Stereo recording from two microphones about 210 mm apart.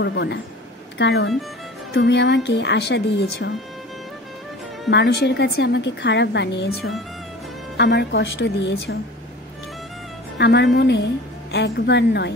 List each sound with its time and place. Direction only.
0.0 s a woman's voice: 55° left (ahead or behind)
4.8 s a woman's voice: 55° left (ahead or behind)
10.3 s speech: 55° left (ahead or behind)